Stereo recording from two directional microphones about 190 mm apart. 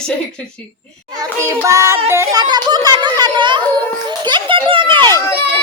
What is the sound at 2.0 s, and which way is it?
Music, 15° right (ahead or behind).